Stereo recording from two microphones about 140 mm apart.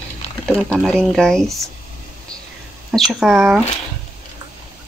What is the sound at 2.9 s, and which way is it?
Speech, 5° right (ahead or behind).